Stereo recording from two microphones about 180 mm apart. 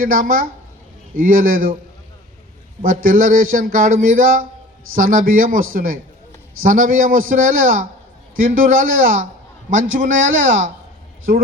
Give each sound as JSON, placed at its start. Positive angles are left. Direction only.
{"t": 0.0, "sound": "speech", "side_deg": -50}
{"t": 2.8, "sound": "speech", "side_deg": -50}